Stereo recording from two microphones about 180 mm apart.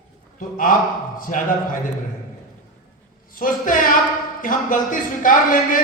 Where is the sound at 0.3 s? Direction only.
50° left (ahead or behind).